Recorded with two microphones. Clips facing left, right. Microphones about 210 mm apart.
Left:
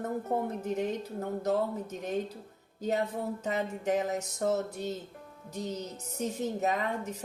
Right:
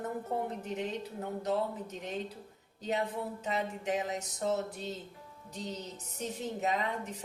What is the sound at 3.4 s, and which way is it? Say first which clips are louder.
Speech: left 3 dB; 45° left (ahead or behind).